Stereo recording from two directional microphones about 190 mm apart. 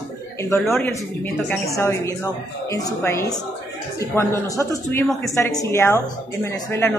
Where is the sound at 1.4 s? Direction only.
15° left (ahead or behind).